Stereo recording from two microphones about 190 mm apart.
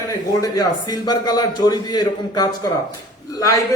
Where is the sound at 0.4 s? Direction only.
20° left (ahead or behind).